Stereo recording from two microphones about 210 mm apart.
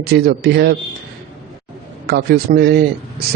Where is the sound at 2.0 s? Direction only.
50° right (ahead or behind).